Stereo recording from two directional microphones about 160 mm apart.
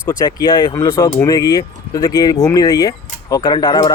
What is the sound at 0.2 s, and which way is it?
Speech, 25° left (ahead or behind).